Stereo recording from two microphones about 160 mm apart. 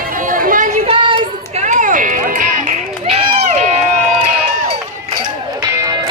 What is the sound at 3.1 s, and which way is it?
Run, 45° right (ahead or behind).